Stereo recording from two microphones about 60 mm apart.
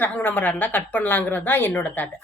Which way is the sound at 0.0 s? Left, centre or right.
Left.